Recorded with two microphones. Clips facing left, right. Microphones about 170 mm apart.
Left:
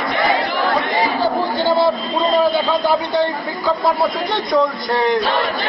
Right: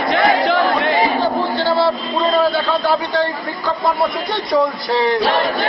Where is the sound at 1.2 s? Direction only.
15° left (ahead or behind).